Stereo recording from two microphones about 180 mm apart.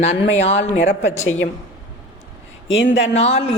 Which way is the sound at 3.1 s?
35° left (ahead or behind).